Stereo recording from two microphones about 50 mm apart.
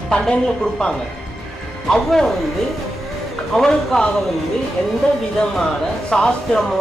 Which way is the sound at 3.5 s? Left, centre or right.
Centre.